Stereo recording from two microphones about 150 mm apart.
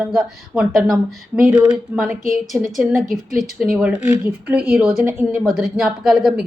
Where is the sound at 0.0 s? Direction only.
5° right (ahead or behind).